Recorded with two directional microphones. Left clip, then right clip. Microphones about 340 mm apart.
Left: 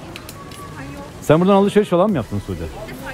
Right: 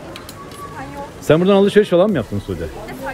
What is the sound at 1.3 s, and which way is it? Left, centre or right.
Speech, left.